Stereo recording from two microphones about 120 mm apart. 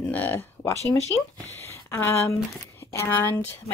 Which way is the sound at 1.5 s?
15° left (ahead or behind).